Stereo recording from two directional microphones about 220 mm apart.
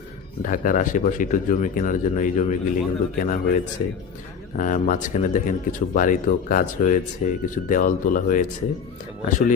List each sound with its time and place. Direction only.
0.4 s speech: 35° left (ahead or behind)